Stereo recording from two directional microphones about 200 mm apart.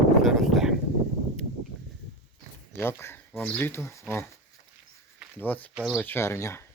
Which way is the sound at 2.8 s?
10° left (ahead or behind).